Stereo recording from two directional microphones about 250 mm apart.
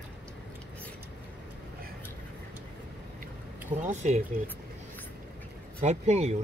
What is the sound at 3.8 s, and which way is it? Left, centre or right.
Speech, right.